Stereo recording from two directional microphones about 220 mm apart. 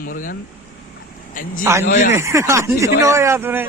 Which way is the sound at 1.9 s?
35° left (ahead or behind).